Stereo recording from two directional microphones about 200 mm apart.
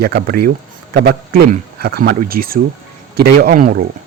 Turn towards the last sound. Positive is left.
turn(degrees=-45)  # may be behind; listen again after turning